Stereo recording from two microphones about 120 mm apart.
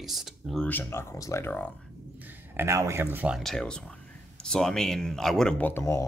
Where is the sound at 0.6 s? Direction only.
15° left (ahead or behind).